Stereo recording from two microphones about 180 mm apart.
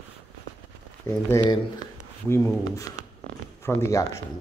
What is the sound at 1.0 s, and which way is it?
Speech, 20° left (ahead or behind).